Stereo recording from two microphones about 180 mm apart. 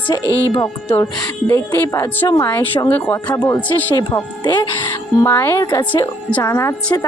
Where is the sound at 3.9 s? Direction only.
25° left (ahead or behind).